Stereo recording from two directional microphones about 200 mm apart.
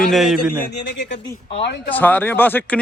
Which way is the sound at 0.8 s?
60° left (ahead or behind).